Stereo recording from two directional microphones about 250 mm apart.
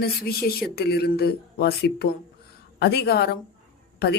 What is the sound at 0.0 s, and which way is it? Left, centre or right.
Speech, left.